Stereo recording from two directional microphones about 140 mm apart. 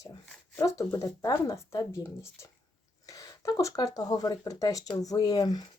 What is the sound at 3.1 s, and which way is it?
Speech, 25° left (ahead or behind).